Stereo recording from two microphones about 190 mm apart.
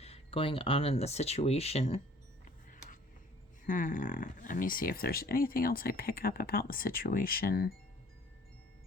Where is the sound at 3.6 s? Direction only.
45° left (ahead or behind).